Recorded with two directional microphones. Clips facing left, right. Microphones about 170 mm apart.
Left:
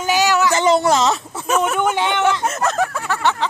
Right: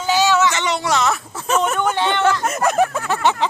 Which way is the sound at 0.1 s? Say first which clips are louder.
Right 1 dB; 15° left (ahead or behind).